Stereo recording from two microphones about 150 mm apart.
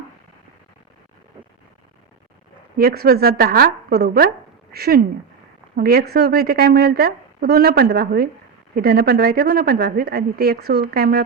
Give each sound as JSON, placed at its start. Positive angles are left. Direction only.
{"t": 2.7, "sound": "a woman's voice", "side_deg": -90}